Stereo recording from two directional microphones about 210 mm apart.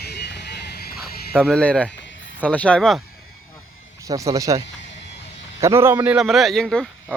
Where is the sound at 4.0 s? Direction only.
15° right (ahead or behind).